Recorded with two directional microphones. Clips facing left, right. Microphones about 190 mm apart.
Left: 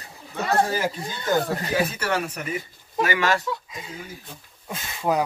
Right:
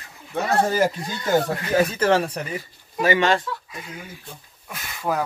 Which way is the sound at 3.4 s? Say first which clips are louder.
Left 2 dB; 20° left (ahead or behind).